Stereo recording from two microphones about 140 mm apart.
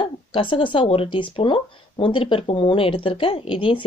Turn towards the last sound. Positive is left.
turn(degrees=40)  # may be behind; listen again after turning